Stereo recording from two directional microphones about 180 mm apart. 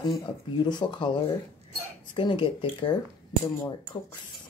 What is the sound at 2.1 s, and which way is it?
Speech, 25° left (ahead or behind).